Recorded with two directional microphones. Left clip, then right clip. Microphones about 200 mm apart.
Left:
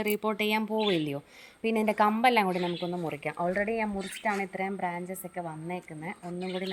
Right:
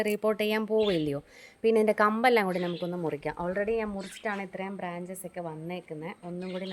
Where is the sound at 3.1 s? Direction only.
15° right (ahead or behind).